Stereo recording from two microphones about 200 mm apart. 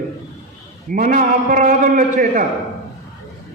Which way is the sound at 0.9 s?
40° right (ahead or behind).